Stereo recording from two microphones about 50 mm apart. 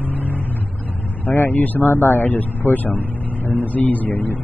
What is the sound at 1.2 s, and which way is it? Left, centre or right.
Speech, left.